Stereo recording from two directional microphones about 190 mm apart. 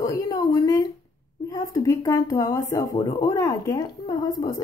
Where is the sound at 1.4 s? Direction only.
20° left (ahead or behind).